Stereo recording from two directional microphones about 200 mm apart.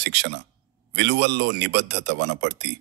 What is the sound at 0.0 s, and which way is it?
Speech, 60° right (ahead or behind).